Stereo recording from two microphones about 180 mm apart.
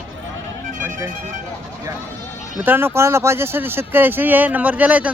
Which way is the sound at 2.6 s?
10° right (ahead or behind).